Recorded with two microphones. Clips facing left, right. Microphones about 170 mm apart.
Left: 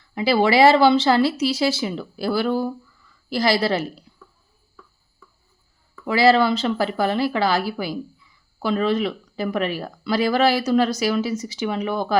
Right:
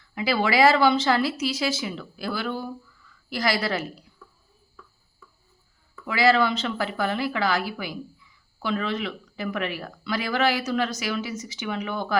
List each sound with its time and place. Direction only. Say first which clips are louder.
0.1 s speech: left 6 dB; 30° left (ahead or behind)
6.1 s speech: left 4 dB; 30° left (ahead or behind)